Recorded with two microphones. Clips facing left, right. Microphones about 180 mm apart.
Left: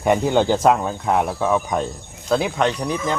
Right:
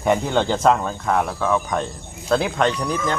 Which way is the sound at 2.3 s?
Centre (ahead or behind).